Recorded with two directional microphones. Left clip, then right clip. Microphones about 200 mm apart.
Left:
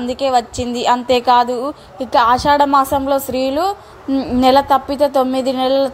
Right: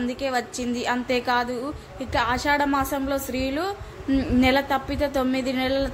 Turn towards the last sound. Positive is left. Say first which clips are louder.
# left 10 dB
turn(degrees=25)  # may be behind; listen again after turning